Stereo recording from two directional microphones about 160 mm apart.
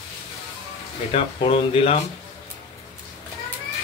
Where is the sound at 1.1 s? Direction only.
35° left (ahead or behind).